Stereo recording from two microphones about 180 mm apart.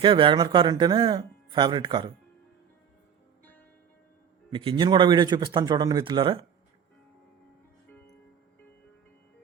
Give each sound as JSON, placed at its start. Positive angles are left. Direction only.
{"t": 0.0, "sound": "speech", "side_deg": -30}
{"t": 4.5, "sound": "speech", "side_deg": -30}